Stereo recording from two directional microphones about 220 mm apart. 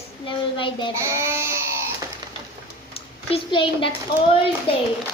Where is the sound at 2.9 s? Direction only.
25° left (ahead or behind).